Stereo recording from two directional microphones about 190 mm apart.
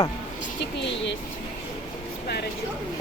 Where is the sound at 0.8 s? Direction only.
70° left (ahead or behind).